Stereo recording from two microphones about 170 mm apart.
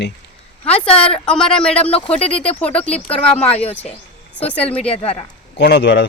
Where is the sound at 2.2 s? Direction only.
35° left (ahead or behind).